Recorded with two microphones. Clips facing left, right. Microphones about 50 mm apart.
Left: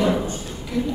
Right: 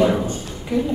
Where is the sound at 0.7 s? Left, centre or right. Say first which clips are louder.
Right 4 dB; right.